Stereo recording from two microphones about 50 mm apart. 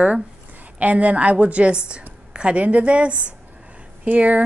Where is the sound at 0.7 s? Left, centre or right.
Right.